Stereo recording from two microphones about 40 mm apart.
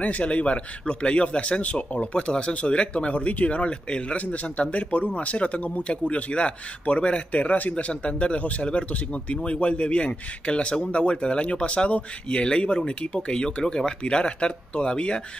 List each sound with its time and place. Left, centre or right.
0.0 s a man's voice: left
7.7 s a man's voice: left